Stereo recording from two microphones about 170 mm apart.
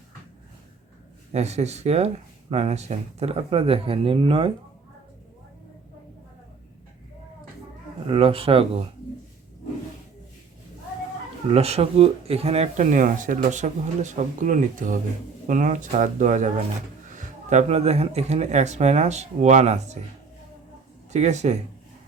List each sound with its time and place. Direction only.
1.3 s speech: 40° right (ahead or behind)
8.0 s speech: 30° right (ahead or behind)
11.4 s speech: 35° right (ahead or behind)
21.1 s speech: 40° right (ahead or behind)